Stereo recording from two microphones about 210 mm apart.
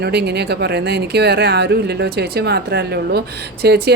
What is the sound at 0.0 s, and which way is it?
Speech, 50° right (ahead or behind).